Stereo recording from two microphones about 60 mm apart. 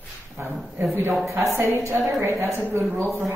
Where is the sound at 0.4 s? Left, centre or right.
Right.